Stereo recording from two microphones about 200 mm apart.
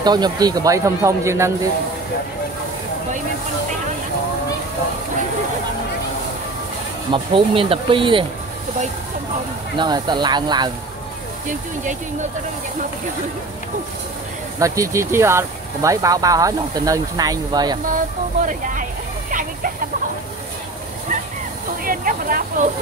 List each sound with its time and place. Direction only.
0.0 s speech: 20° right (ahead or behind)
7.1 s speech: 25° right (ahead or behind)
9.8 s speech: 20° right (ahead or behind)
11.8 s speech: 40° right (ahead or behind)
14.6 s speech: 15° right (ahead or behind)
18.4 s speech: 40° right (ahead or behind)
21.8 s a sound: 45° right (ahead or behind)